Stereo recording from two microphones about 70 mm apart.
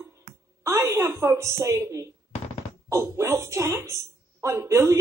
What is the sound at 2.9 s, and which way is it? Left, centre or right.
A woman's voice, right.